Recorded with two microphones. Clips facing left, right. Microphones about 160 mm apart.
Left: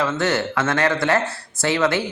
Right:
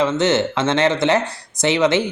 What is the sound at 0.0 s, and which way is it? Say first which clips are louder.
A man's voice: right 4 dB; 20° right (ahead or behind).